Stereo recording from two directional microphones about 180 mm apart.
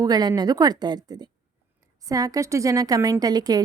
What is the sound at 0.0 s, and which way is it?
A woman's voice, 20° right (ahead or behind).